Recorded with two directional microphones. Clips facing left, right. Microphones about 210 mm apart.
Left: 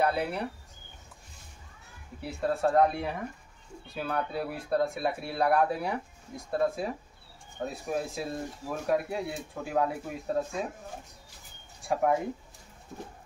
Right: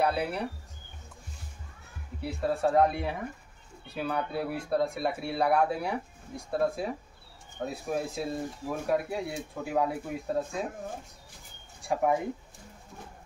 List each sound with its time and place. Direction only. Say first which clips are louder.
0.0 s speech: even; centre (ahead or behind)
2.2 s speech: even; centre (ahead or behind)
11.9 s speech: even; centre (ahead or behind)